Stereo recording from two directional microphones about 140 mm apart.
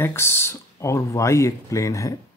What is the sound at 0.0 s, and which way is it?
Speech, 15° left (ahead or behind).